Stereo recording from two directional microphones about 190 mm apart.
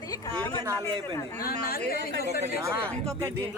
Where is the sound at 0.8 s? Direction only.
15° left (ahead or behind).